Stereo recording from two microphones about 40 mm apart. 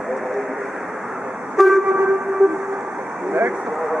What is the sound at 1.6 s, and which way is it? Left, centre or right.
Vehicle, centre.